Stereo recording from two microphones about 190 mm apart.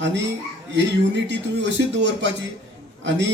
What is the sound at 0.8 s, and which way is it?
A man's voice, 65° right (ahead or behind).